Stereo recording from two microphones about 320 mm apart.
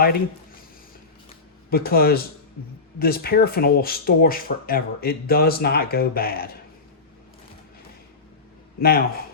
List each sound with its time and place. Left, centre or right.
1.7 s speech: left
8.8 s speech: left